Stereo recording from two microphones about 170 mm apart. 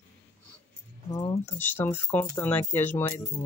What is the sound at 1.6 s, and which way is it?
Speech, 10° left (ahead or behind).